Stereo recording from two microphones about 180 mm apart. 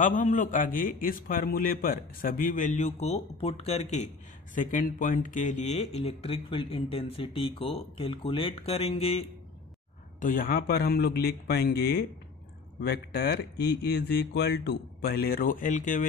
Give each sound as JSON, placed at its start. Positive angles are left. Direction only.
{"t": 0.0, "sound": "a man's voice", "side_deg": 45}
{"t": 4.6, "sound": "speech", "side_deg": 50}
{"t": 10.2, "sound": "speech", "side_deg": 50}